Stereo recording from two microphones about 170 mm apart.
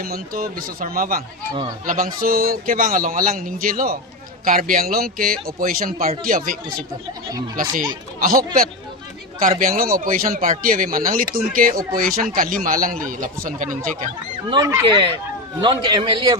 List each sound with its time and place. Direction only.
0.0 s a man's voice: 55° right (ahead or behind)
8.2 s a man's voice: 60° right (ahead or behind)
9.6 s a man's voice: 55° right (ahead or behind)
14.5 s a man's voice: 25° right (ahead or behind)